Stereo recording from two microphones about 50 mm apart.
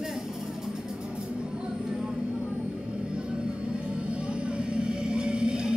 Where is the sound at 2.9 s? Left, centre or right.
Centre.